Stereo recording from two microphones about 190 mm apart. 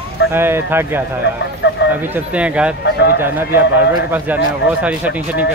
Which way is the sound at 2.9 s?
60° left (ahead or behind).